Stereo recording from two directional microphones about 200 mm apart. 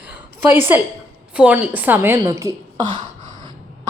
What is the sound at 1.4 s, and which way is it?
A woman's voice, 5° right (ahead or behind).